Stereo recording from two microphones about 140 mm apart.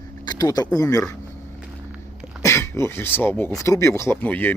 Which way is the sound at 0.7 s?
25° left (ahead or behind).